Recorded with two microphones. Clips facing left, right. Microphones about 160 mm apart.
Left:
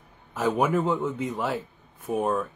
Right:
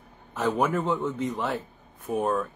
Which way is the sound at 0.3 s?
10° left (ahead or behind).